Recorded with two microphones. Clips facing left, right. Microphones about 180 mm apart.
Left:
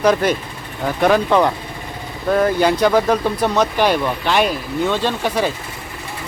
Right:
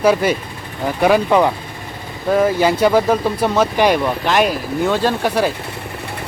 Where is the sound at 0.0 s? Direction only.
5° right (ahead or behind).